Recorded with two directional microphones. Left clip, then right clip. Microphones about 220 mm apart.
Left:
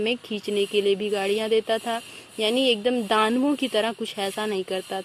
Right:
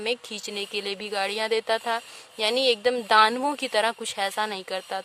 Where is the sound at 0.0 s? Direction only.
25° right (ahead or behind).